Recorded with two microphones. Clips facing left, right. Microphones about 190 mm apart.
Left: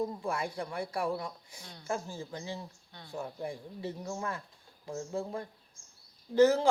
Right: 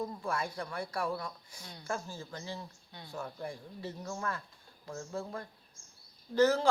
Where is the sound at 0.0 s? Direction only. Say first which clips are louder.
Left 2 dB; 20° left (ahead or behind).